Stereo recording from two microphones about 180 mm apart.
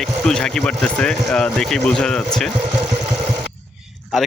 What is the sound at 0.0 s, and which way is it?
Speech, 5° left (ahead or behind).